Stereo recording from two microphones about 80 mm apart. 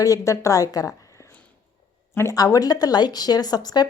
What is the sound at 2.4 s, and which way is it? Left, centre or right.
Speech, left.